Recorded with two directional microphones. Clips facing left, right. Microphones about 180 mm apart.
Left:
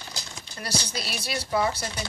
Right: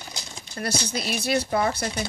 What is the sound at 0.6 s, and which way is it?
Speech, 50° right (ahead or behind).